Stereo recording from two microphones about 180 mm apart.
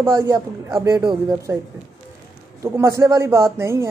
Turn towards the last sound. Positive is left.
turn(degrees=-15)  # may be behind; listen again after turning